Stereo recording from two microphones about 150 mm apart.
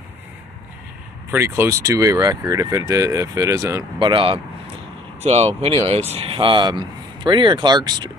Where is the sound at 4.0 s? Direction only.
35° right (ahead or behind).